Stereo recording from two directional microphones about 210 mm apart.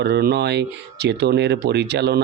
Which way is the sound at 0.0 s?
50° right (ahead or behind).